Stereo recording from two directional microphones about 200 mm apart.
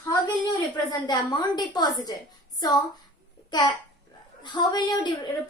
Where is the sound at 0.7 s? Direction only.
20° left (ahead or behind).